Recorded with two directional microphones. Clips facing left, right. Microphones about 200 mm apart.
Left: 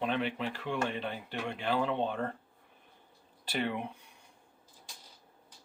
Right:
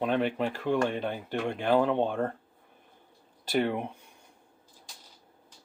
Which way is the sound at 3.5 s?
50° right (ahead or behind).